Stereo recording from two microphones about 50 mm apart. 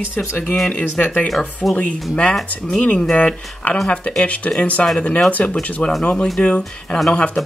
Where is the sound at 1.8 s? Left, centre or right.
Left.